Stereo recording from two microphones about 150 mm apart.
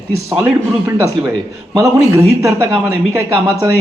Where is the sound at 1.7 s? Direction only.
20° right (ahead or behind).